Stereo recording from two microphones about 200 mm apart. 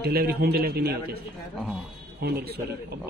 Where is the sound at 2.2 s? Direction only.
50° right (ahead or behind).